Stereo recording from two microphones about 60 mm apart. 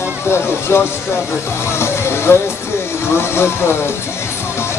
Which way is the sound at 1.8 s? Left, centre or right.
Left.